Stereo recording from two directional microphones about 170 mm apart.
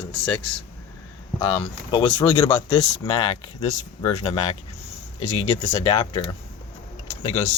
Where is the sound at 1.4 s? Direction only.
35° left (ahead or behind).